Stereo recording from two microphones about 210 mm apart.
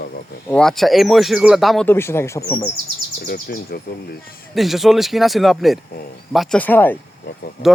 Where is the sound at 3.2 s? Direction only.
45° left (ahead or behind).